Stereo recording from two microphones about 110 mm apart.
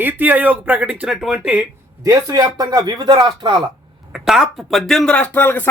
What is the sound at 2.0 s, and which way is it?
Speech, 35° right (ahead or behind).